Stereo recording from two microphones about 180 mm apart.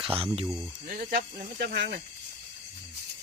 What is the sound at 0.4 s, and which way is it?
Speech, 5° right (ahead or behind).